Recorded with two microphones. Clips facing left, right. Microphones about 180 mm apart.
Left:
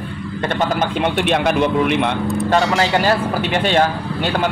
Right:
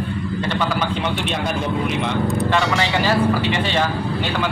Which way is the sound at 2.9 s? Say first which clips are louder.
Left 1 dB; 55° left (ahead or behind).